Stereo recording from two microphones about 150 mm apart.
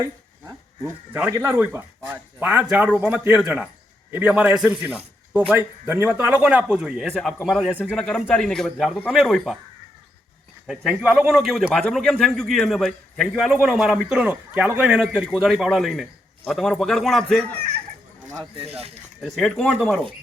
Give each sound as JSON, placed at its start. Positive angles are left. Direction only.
{"t": 0.0, "sound": "a man's voice", "side_deg": -20}
{"t": 10.7, "sound": "a man's voice", "side_deg": -5}
{"t": 18.5, "sound": "speech", "side_deg": -40}
{"t": 19.2, "sound": "a man's voice", "side_deg": 0}